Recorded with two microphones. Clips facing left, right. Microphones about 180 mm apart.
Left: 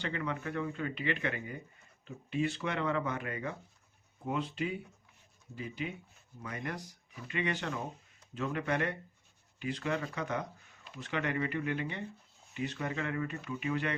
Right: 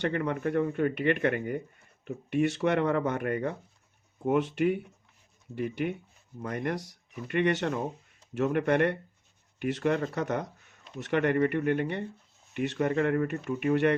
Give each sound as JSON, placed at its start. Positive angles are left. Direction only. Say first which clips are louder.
{"t": 0.0, "sound": "speech", "louder": "right 8 dB", "side_deg": -55}
{"t": 2.0, "sound": "speech", "louder": "right 6 dB", "side_deg": -70}
{"t": 4.3, "sound": "speech", "louder": "right 9 dB", "side_deg": -70}
{"t": 6.4, "sound": "speech", "louder": "right 8 dB", "side_deg": -50}